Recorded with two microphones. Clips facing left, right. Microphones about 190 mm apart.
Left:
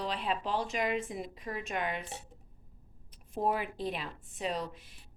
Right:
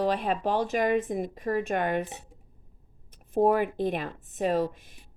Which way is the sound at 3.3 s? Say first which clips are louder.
Right 9 dB; 50° right (ahead or behind).